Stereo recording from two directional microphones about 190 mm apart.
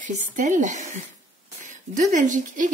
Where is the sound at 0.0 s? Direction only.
40° right (ahead or behind).